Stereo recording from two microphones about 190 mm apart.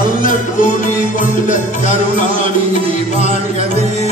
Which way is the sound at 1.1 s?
45° left (ahead or behind).